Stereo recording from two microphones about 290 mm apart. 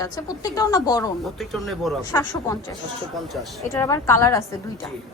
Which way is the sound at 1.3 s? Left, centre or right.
Centre.